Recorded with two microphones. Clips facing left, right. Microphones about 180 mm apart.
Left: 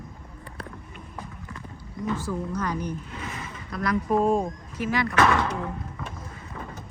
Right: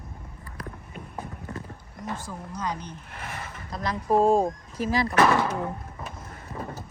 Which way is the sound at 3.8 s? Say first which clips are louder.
Right 1 dB; 25° right (ahead or behind).